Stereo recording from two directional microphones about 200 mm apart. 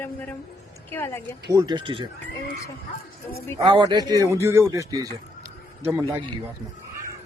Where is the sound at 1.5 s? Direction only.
20° right (ahead or behind).